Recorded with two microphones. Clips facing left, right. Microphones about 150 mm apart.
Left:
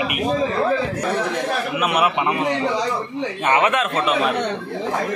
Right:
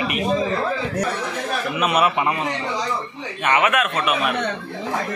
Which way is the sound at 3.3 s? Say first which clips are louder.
Even; 30° left (ahead or behind).